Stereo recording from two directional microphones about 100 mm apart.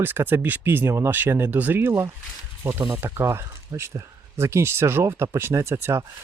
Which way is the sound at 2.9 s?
25° right (ahead or behind).